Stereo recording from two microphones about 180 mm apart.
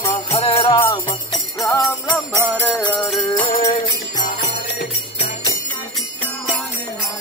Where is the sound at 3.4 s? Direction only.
35° left (ahead or behind).